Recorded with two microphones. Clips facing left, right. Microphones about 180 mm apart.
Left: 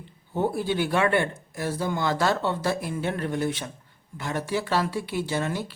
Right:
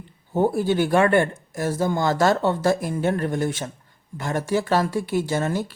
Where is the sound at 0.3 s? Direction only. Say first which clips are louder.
Right 5 dB; 45° right (ahead or behind).